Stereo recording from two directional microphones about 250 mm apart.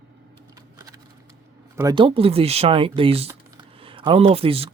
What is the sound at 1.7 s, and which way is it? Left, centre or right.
Speech, centre.